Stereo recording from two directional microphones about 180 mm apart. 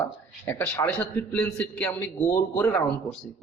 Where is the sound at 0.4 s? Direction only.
10° left (ahead or behind).